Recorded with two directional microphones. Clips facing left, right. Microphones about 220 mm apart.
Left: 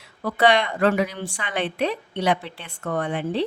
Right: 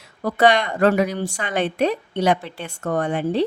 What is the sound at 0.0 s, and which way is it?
Speech, 45° right (ahead or behind).